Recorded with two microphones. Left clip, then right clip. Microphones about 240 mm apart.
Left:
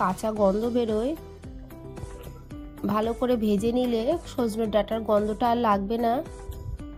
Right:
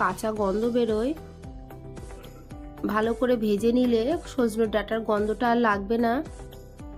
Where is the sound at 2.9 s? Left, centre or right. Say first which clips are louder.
Right 1 dB; left.